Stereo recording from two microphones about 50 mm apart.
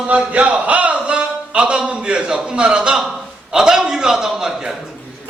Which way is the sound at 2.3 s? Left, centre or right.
Centre.